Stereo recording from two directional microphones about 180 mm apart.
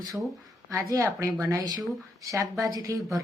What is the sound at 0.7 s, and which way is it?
A woman's voice, 15° right (ahead or behind).